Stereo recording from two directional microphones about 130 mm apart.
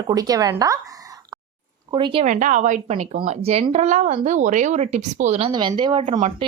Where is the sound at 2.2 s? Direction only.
70° right (ahead or behind).